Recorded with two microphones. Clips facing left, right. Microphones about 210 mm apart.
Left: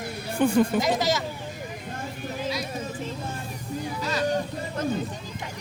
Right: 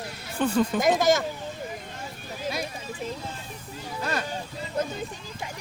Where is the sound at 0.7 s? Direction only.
50° right (ahead or behind).